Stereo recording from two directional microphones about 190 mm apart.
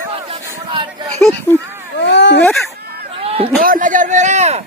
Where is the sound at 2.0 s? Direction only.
65° left (ahead or behind).